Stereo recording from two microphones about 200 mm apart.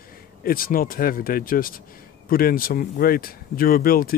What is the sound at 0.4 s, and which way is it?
Speech, 45° left (ahead or behind).